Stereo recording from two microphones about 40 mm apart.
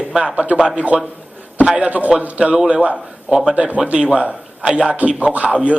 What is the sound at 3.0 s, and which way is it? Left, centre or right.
Speech, centre.